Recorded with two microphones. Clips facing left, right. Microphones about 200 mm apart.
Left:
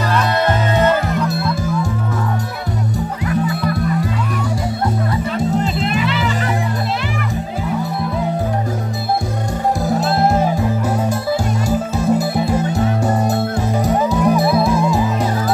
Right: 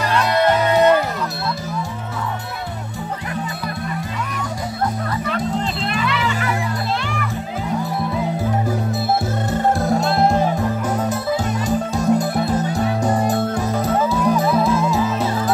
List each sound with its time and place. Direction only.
6.0 s music: 30° left (ahead or behind)
9.8 s music: centre (ahead or behind)